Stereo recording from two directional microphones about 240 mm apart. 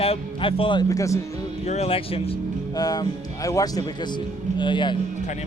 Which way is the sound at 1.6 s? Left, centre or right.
Left.